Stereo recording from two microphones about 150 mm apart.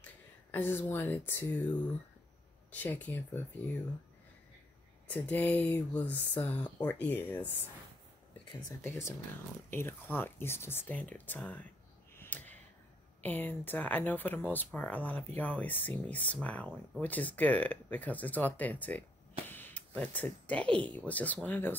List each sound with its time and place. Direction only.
0.0 s speech: 15° left (ahead or behind)
5.0 s speech: 10° left (ahead or behind)
8.8 s speech: 15° left (ahead or behind)
12.2 s a sound: 10° left (ahead or behind)
13.2 s speech: 10° left (ahead or behind)